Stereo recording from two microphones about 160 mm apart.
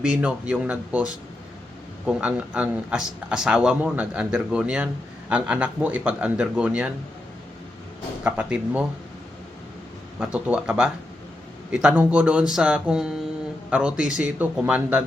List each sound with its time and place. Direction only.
0.1 s speech: 5° right (ahead or behind)
2.0 s speech: 5° right (ahead or behind)
8.2 s speech: 10° right (ahead or behind)
10.2 s speech: 10° right (ahead or behind)